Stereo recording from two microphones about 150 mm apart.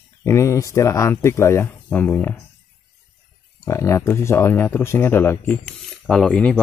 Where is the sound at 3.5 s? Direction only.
20° left (ahead or behind).